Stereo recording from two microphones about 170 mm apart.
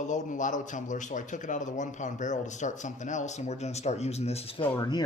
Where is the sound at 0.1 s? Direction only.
50° left (ahead or behind).